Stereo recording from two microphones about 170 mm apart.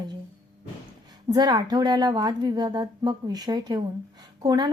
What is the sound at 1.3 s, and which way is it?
A woman's voice, 25° right (ahead or behind).